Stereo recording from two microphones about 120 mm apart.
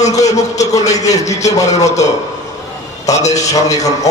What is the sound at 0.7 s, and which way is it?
Speech, 70° left (ahead or behind).